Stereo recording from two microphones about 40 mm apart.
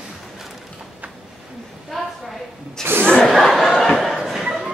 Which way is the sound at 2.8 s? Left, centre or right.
Right.